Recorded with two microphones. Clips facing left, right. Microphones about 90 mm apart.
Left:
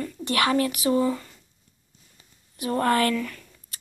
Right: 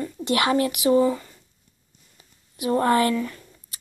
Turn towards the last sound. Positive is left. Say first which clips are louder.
# right 2 dB
turn(degrees=-25)  # may be behind; listen again after turning